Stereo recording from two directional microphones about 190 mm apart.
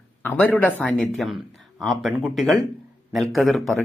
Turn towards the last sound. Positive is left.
turn(degrees=0)  # may be behind; listen again after turning